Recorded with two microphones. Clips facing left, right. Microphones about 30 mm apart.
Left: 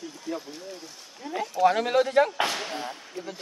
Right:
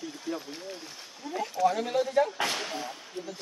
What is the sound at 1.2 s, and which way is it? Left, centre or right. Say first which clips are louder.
Speech: left 3 dB; left.